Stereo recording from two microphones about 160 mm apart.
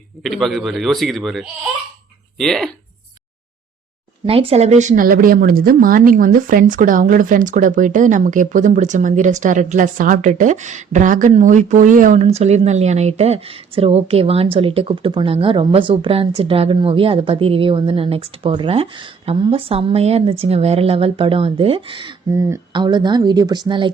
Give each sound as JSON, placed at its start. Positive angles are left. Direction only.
{"t": 0.2, "sound": "a man's voice", "side_deg": 0}
{"t": 4.3, "sound": "speech", "side_deg": -35}
{"t": 22.3, "sound": "a woman's voice", "side_deg": -20}